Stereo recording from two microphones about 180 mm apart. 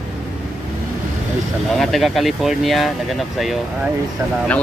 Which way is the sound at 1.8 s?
Centre (ahead or behind).